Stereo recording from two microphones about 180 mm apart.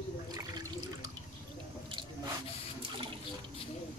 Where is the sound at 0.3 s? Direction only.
20° right (ahead or behind).